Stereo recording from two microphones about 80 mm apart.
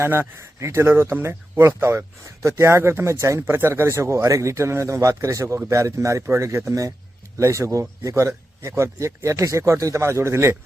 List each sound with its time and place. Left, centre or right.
0.0 s speech: right